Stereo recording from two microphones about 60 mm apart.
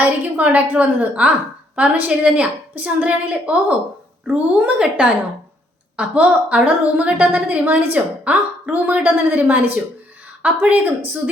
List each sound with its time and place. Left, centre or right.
0.0 s a woman's voice: right
6.0 s a woman's voice: right